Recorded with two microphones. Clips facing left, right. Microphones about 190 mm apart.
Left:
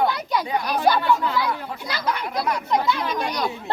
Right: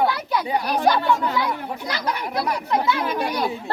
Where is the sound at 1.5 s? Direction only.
15° right (ahead or behind).